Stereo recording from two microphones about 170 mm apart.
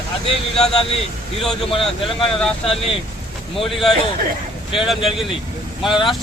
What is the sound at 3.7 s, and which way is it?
Speech, centre (ahead or behind).